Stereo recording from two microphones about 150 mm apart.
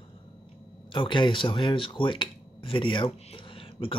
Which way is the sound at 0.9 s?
35° left (ahead or behind).